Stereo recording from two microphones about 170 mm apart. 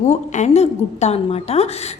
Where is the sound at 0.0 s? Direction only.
45° left (ahead or behind).